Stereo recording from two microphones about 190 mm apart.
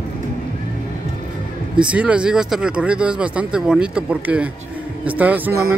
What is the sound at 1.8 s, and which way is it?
Speech, 5° right (ahead or behind).